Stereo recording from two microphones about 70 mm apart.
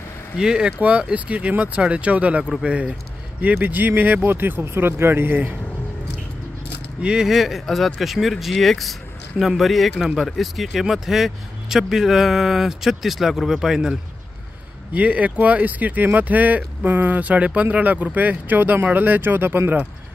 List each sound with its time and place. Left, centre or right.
0.4 s speech: centre
3.5 s speech: right
7.0 s speech: centre
14.9 s speech: right